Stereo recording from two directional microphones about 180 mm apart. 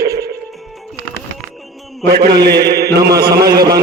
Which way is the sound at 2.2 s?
65° right (ahead or behind).